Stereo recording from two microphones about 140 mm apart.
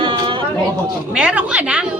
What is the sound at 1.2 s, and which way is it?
Speech, 10° right (ahead or behind).